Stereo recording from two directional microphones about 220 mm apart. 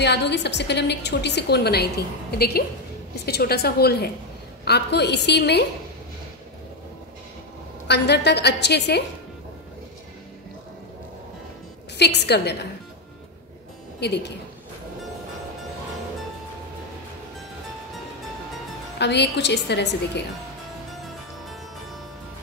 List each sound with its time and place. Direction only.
0.0 s a woman's voice: 50° left (ahead or behind)
7.9 s a woman's voice: 50° left (ahead or behind)
12.0 s a woman's voice: 50° left (ahead or behind)
13.9 s speech: 50° left (ahead or behind)
18.9 s a woman's voice: 50° left (ahead or behind)